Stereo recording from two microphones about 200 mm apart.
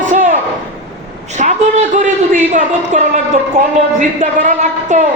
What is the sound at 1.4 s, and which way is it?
A woman's voice, 40° right (ahead or behind).